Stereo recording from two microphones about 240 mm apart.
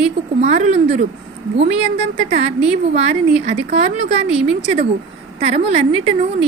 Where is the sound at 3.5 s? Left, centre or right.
Right.